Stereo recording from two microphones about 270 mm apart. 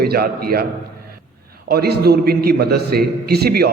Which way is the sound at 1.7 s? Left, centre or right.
Right.